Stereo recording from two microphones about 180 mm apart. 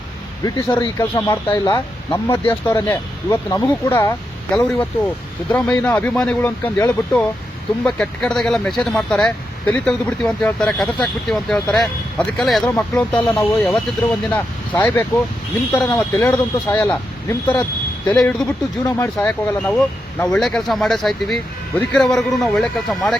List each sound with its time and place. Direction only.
0.4 s speech: 20° left (ahead or behind); by 23.1 s 5° left (ahead or behind)